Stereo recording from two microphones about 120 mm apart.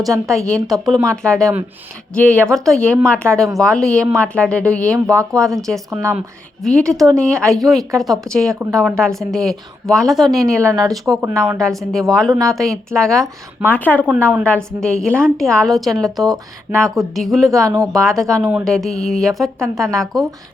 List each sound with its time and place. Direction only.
0.3 s a woman's voice: 5° left (ahead or behind)
5.0 s speech: 30° right (ahead or behind)
5.5 s a woman's voice: centre (ahead or behind)
6.9 s speech: 30° right (ahead or behind)
7.2 s a woman's voice: 5° left (ahead or behind)
10.6 s speech: 25° right (ahead or behind)
10.8 s a woman's voice: centre (ahead or behind)
12.3 s speech: 30° right (ahead or behind)
12.5 s a woman's voice: centre (ahead or behind)
13.7 s a woman's voice: 15° left (ahead or behind)
17.5 s speech: 30° right (ahead or behind)
17.9 s a woman's voice: 5° left (ahead or behind)